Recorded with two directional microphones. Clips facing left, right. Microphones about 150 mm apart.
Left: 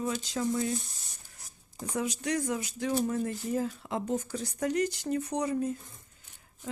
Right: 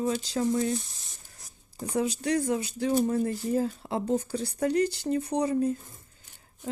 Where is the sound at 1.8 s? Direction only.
30° right (ahead or behind).